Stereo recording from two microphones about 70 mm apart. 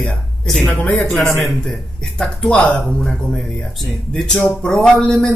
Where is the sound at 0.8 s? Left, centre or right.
Left.